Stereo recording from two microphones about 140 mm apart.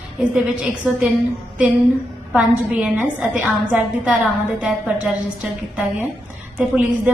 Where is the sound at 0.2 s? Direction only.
5° right (ahead or behind).